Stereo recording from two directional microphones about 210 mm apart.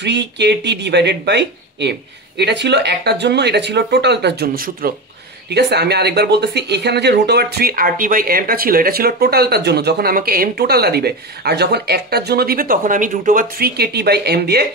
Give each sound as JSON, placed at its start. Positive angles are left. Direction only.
{"t": 0.0, "sound": "speech", "side_deg": -55}